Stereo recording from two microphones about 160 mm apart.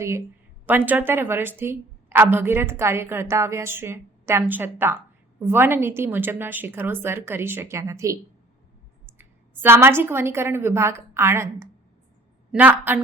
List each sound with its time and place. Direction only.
0.9 s a woman's voice: 10° right (ahead or behind)
9.6 s a woman's voice: 15° right (ahead or behind)